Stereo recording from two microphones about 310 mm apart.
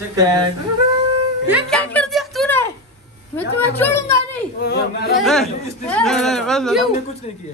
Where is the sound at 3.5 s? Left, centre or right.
Centre.